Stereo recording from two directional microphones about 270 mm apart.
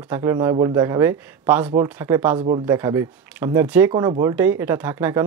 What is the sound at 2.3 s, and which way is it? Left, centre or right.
Speech, right.